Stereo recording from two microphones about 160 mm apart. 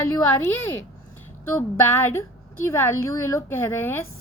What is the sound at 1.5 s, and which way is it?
A woman's voice, 15° left (ahead or behind).